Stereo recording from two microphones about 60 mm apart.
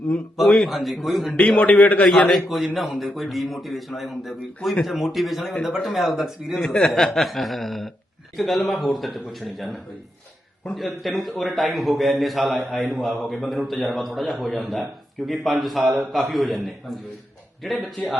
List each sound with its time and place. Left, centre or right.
0.4 s a man's voice: centre
1.4 s a man's voice: left
2.0 s a man's voice: centre